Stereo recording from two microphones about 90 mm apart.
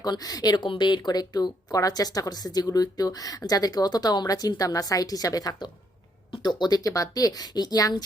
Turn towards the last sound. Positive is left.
turn(degrees=45)  # may be behind; listen again after turning